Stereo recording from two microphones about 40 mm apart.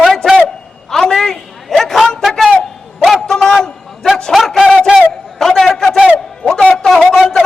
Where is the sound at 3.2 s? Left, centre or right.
Centre.